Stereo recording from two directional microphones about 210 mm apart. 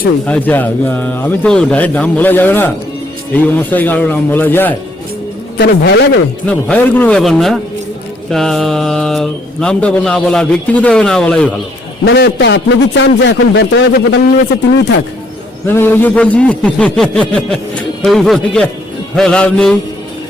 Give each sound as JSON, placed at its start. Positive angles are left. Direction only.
{"t": 0.3, "sound": "speech", "side_deg": 5}
{"t": 5.5, "sound": "a man's voice", "side_deg": 50}
{"t": 6.4, "sound": "speech", "side_deg": 5}
{"t": 12.0, "sound": "a man's voice", "side_deg": 55}
{"t": 15.6, "sound": "speech", "side_deg": 10}